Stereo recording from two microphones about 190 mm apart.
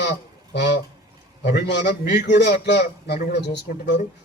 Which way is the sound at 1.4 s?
65° left (ahead or behind).